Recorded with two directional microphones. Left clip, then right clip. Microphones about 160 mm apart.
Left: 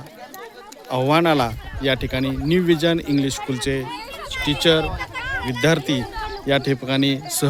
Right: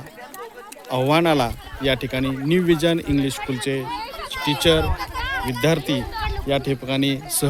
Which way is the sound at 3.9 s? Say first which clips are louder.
Right 2 dB; 90° left.